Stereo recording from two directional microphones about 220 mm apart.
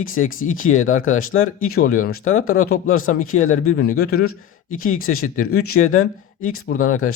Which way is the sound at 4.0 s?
45° left (ahead or behind).